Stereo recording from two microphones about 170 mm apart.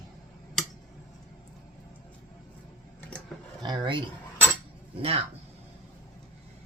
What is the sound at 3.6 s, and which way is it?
Speech, 25° right (ahead or behind).